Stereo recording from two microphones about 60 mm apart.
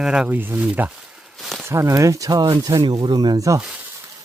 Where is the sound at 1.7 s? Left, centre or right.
Right.